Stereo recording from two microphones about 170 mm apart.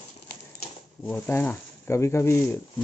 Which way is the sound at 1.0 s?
10° left (ahead or behind).